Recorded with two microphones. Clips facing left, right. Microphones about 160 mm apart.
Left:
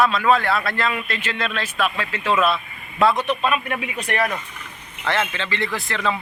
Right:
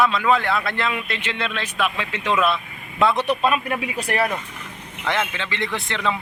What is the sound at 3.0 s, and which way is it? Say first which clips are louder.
Speech: left 1 dB; 5° left (ahead or behind).